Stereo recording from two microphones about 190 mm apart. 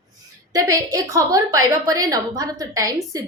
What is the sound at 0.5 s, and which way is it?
A woman's voice, 20° right (ahead or behind).